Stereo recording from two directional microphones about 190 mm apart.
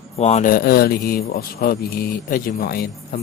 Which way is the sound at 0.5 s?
55° left (ahead or behind).